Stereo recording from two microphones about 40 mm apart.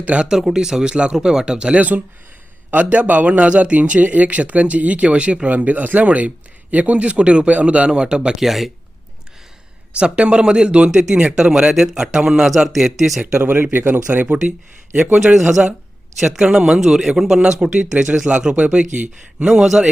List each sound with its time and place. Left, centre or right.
0.0 s a man's voice: right
0.3 s speech: centre
1.7 s a man's voice: right
5.5 s a man's voice: right; by 8.4 s centre
8.4 s speech: centre
10.0 s speech: right
11.7 s speech: centre
13.3 s speech: right
13.6 s speech: right
14.1 s a man's voice: right
15.4 s speech: centre
17.4 s speech: right
19.5 s speech: centre